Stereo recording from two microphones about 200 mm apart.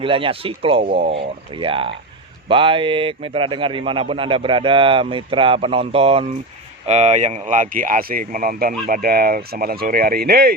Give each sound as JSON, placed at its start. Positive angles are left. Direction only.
{"t": 0.0, "sound": "a man's voice", "side_deg": -25}